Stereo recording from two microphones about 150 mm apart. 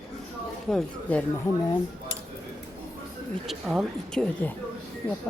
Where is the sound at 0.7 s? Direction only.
5° left (ahead or behind).